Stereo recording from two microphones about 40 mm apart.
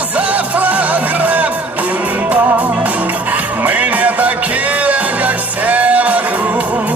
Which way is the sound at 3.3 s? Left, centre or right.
Right.